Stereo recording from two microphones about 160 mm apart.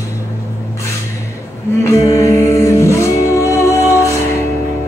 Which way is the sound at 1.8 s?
20° left (ahead or behind).